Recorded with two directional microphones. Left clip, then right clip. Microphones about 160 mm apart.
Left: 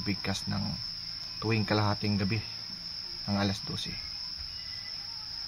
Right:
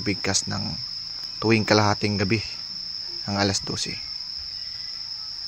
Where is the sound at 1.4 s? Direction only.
35° right (ahead or behind).